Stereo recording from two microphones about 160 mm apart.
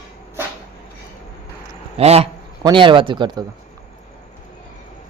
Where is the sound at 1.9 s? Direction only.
40° right (ahead or behind).